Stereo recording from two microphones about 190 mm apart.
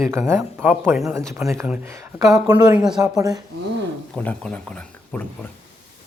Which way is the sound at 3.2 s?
20° right (ahead or behind).